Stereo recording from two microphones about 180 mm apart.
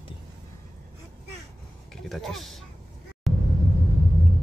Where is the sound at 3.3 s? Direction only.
Centre (ahead or behind).